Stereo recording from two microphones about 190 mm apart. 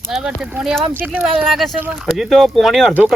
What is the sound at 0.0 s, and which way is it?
Speech, 5° right (ahead or behind).